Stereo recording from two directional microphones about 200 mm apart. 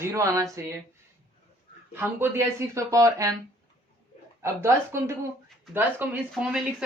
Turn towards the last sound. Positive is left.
turn(degrees=-5)  # may be behind; listen again after turning